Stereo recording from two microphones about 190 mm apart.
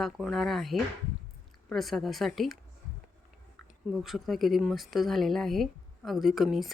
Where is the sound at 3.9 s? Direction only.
Centre (ahead or behind).